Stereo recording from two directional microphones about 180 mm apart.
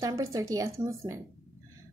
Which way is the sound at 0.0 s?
15° right (ahead or behind).